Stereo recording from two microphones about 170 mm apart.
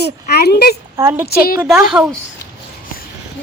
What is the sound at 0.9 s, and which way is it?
Speech, 15° right (ahead or behind).